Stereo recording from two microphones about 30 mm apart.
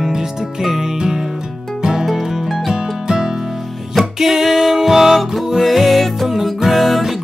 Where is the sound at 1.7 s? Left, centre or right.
Centre.